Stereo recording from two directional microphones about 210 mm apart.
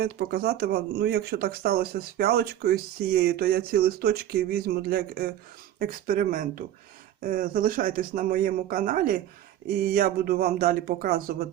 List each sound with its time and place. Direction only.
0.0 s speech: 50° right (ahead or behind)